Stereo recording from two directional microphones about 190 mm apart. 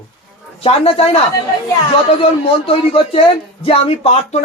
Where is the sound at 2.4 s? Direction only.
30° left (ahead or behind).